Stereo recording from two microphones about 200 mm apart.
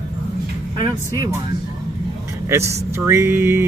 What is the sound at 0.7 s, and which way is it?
Speech, 20° right (ahead or behind).